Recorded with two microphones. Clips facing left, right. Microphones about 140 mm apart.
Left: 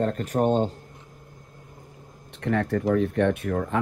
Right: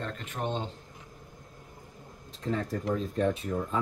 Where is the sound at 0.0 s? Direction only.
40° left (ahead or behind).